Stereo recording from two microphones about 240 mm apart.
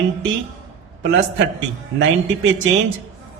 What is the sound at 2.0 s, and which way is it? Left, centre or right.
Speech, right.